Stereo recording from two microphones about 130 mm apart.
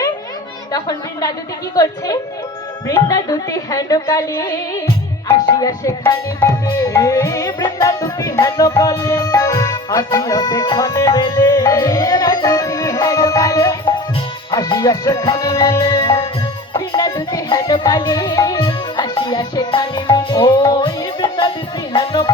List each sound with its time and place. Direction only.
0.7 s music: 30° left (ahead or behind)
18.6 s music: 40° left (ahead or behind)
21.9 s speech: 35° left (ahead or behind)